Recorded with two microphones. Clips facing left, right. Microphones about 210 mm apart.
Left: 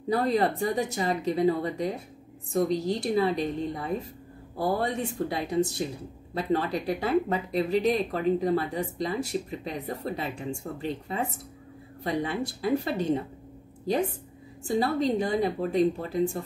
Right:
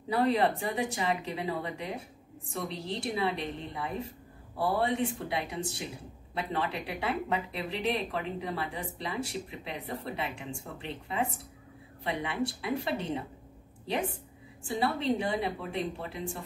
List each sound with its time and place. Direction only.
0.1 s speech: 40° left (ahead or behind)
14.7 s speech: 40° left (ahead or behind)